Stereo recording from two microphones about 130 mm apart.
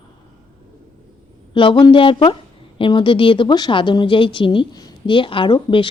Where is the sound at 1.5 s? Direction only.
40° left (ahead or behind).